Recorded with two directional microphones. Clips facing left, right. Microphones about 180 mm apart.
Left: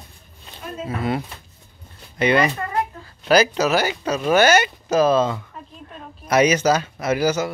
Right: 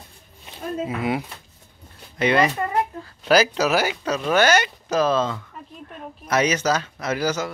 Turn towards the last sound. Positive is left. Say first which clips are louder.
# left 4 dB
turn(degrees=10)  # may be behind; listen again after turning